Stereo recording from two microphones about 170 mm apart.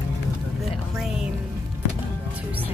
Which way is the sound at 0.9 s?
Centre (ahead or behind).